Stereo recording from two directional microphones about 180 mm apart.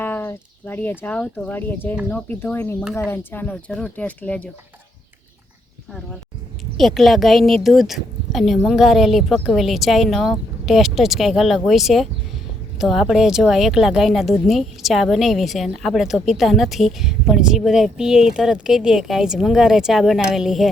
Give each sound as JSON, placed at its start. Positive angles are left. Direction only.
{"t": 0.0, "sound": "speech", "side_deg": 10}
{"t": 6.7, "sound": "a woman's voice", "side_deg": 0}